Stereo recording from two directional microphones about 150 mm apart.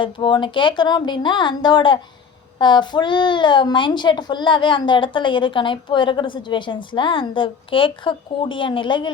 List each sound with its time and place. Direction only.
0.0 s a child's voice: 35° left (ahead or behind)